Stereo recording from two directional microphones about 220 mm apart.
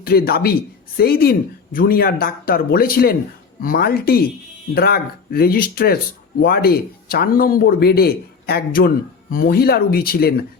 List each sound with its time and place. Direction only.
0.0 s speech: 45° left (ahead or behind)